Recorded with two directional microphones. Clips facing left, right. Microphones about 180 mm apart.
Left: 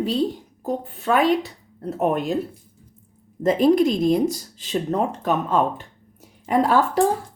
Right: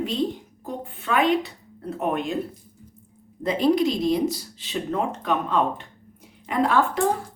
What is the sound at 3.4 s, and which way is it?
A woman's voice, 50° left (ahead or behind).